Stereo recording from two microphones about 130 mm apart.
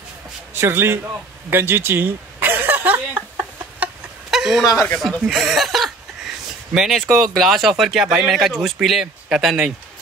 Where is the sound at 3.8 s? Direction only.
5° right (ahead or behind).